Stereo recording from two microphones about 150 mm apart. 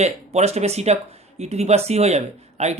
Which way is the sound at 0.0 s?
45° right (ahead or behind).